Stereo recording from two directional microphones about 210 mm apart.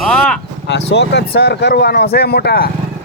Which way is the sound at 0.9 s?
50° left (ahead or behind).